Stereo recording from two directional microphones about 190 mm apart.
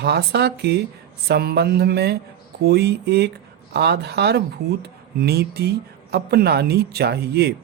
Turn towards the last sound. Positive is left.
turn(degrees=-60)  # may be behind; listen again after turning